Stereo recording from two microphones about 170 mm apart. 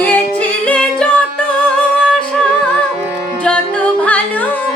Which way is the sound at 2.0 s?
5° left (ahead or behind).